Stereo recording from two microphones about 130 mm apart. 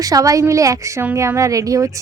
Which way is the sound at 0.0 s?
25° right (ahead or behind).